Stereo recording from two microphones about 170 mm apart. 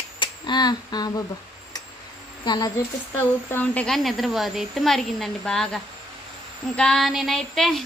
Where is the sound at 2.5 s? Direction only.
25° left (ahead or behind).